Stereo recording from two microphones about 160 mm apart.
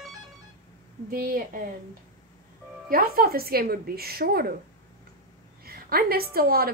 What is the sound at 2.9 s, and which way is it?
A woman's voice, 65° right (ahead or behind).